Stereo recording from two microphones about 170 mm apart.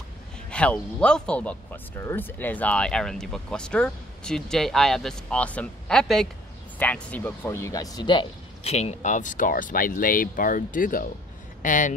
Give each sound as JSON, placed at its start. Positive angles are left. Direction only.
{"t": 0.5, "sound": "speech", "side_deg": 5}
{"t": 8.7, "sound": "speech", "side_deg": 45}